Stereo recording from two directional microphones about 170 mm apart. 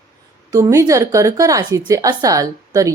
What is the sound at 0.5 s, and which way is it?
A woman's voice, 20° right (ahead or behind).